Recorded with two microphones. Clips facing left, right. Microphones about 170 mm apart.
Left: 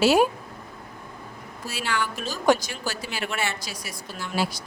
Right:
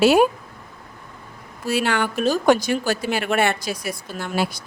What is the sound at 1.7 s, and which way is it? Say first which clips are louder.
A woman's voice: right 8 dB; 60° right (ahead or behind).